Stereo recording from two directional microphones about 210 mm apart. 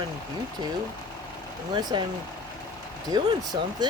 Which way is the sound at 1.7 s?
20° right (ahead or behind).